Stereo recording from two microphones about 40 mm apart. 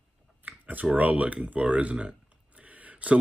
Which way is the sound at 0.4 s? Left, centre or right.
Right.